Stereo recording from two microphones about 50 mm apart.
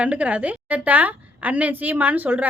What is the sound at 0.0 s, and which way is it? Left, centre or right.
A woman's voice, right.